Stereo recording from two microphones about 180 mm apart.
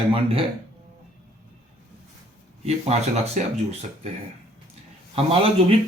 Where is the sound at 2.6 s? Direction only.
35° right (ahead or behind).